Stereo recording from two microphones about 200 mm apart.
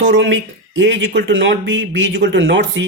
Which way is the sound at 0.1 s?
65° right (ahead or behind).